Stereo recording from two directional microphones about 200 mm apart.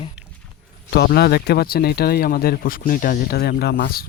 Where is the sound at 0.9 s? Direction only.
55° left (ahead or behind).